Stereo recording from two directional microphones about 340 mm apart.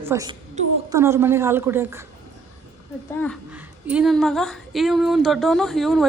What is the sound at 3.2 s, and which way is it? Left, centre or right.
Speech, centre.